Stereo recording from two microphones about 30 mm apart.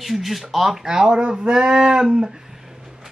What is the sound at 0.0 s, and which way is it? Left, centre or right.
Speech, centre.